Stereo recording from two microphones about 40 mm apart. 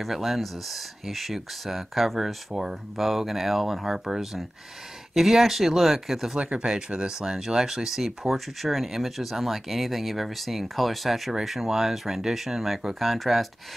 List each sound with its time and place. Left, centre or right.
0.0 s speech: centre
6.3 s speech: right
6.6 s speech: centre